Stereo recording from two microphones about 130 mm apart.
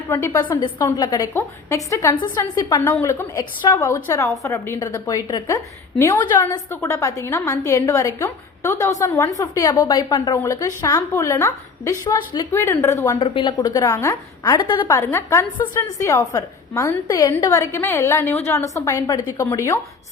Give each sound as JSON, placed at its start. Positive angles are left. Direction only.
{"t": 0.1, "sound": "a woman's voice", "side_deg": 20}
{"t": 10.3, "sound": "a woman's voice", "side_deg": 25}
{"t": 13.1, "sound": "a woman's voice", "side_deg": 40}
{"t": 13.7, "sound": "a woman's voice", "side_deg": 25}